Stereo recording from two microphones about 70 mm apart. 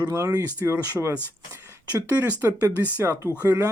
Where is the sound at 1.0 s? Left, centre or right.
Centre.